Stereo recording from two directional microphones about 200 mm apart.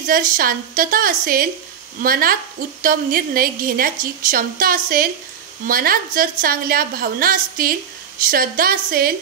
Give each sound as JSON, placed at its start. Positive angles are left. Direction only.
{"t": 0.0, "sound": "a woman's voice", "side_deg": -45}